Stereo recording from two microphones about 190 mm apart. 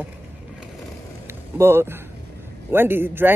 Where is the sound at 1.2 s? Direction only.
15° right (ahead or behind).